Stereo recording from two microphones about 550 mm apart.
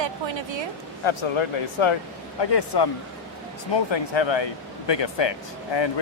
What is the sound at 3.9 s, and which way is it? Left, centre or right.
Speech, left.